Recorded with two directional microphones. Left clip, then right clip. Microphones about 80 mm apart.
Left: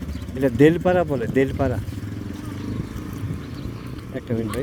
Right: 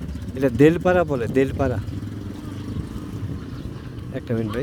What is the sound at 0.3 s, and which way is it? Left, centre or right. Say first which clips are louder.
Speech: even; right.